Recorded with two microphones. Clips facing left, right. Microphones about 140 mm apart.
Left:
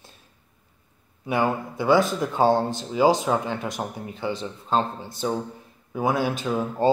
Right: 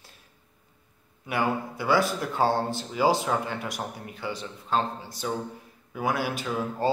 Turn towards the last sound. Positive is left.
turn(degrees=20)  # may be behind; listen again after turning